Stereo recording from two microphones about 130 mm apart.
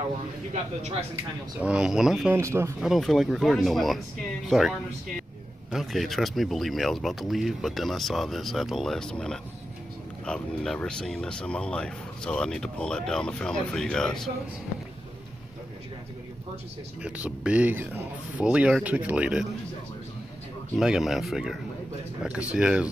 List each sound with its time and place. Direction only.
1.6 s speech: 5° right (ahead or behind)
2.3 s speech: 20° right (ahead or behind)
2.8 s speech: centre (ahead or behind)
17.0 s speech: 10° right (ahead or behind)
20.7 s speech: 5° right (ahead or behind)
22.6 s speech: 10° right (ahead or behind)